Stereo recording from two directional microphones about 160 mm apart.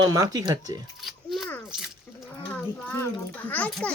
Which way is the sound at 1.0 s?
Centre (ahead or behind).